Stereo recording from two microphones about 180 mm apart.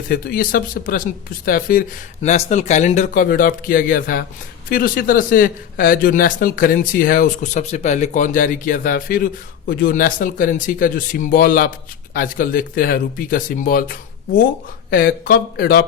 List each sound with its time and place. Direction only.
0.1 s a man's voice: 55° left (ahead or behind)
2.2 s a man's voice: 40° left (ahead or behind); by 15.8 s 60° left (ahead or behind)